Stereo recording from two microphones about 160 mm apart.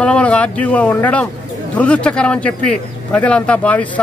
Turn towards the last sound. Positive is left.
turn(degrees=10)  # may be behind; listen again after turning